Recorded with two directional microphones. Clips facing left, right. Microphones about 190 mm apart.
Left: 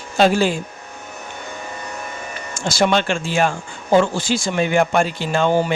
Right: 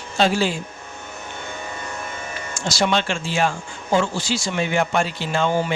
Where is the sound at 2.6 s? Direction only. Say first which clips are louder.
Left 4 dB; 55° left (ahead or behind).